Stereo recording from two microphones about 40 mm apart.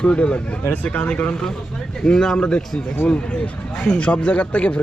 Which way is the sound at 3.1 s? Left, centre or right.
Left.